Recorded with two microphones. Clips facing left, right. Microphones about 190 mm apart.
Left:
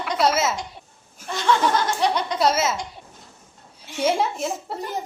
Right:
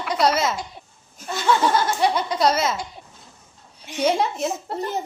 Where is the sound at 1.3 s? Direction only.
5° right (ahead or behind).